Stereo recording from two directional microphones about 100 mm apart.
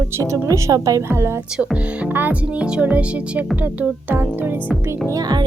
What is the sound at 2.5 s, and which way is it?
Speech, 10° right (ahead or behind).